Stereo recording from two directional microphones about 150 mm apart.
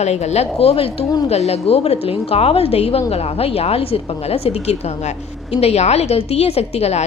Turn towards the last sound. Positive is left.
turn(degrees=45)  # may be behind; listen again after turning